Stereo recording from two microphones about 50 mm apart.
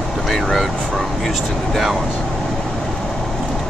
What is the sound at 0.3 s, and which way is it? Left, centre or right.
Speech, centre.